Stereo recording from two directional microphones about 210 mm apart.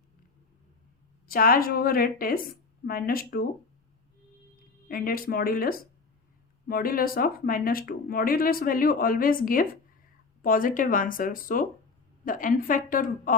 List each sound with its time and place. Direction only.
1.3 s speech: 45° left (ahead or behind)
4.9 s speech: 45° left (ahead or behind)